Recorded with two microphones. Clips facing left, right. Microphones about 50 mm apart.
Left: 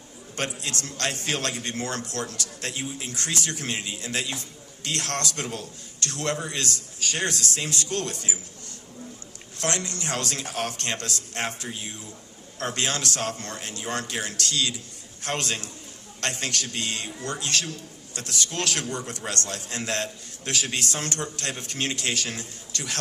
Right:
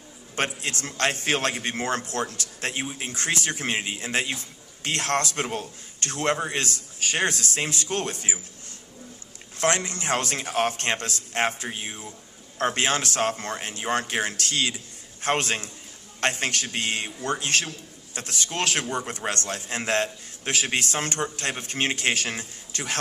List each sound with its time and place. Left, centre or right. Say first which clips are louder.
0.3 s a man's voice: right 3 dB; right
9.6 s a man's voice: right 5 dB; right